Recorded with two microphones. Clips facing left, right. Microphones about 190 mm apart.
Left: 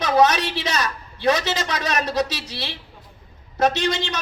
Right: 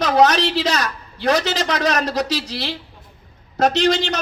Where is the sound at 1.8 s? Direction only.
90° right.